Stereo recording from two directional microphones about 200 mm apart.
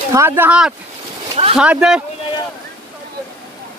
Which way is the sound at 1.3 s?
30° right (ahead or behind).